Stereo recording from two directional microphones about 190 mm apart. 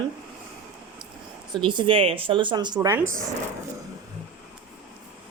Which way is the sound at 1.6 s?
25° right (ahead or behind).